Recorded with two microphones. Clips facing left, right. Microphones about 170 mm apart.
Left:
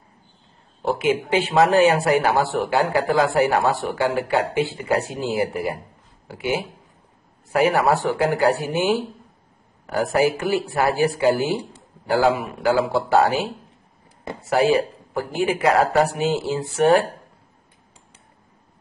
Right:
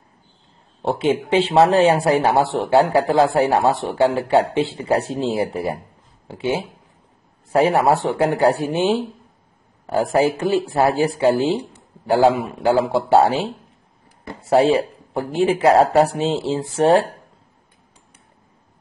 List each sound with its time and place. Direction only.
0.8 s speech: 25° right (ahead or behind)
10.1 s speech: 25° right (ahead or behind)